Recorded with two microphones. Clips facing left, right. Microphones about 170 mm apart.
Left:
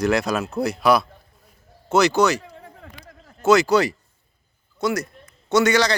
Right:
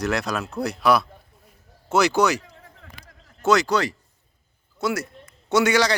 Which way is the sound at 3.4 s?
5° left (ahead or behind).